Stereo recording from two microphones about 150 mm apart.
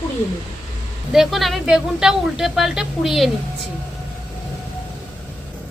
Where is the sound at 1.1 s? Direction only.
Centre (ahead or behind).